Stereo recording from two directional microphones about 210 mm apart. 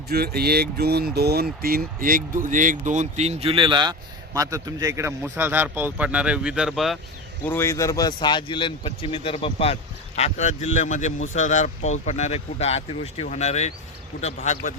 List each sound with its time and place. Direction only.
0.1 s a man's voice: 45° right (ahead or behind); by 7.0 s centre (ahead or behind)
7.4 s speech: 10° left (ahead or behind); by 14.8 s 35° left (ahead or behind)